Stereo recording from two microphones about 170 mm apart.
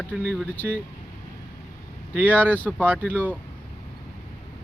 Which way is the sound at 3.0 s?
10° left (ahead or behind).